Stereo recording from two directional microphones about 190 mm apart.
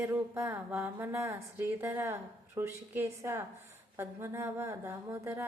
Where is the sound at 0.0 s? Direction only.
10° right (ahead or behind).